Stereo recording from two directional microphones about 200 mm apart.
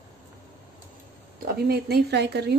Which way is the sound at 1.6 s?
50° right (ahead or behind).